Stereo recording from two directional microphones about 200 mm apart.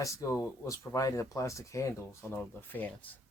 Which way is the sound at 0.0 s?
15° left (ahead or behind).